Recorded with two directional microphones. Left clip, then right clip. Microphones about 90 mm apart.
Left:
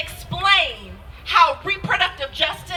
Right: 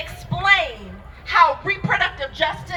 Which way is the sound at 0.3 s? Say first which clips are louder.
Even; 40° left (ahead or behind).